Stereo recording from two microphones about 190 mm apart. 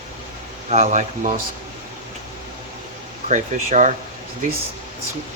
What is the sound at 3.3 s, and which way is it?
Speech, 40° right (ahead or behind).